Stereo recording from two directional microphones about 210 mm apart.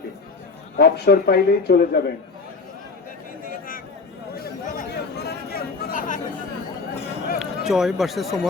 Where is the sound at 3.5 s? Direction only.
45° left (ahead or behind).